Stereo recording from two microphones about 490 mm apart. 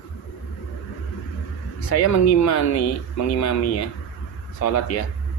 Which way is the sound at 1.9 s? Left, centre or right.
Left.